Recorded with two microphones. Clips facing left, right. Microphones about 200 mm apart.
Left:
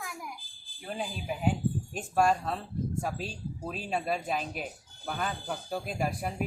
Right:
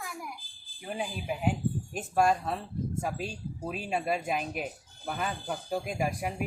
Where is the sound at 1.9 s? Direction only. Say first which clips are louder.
Right 1 dB; 10° right (ahead or behind).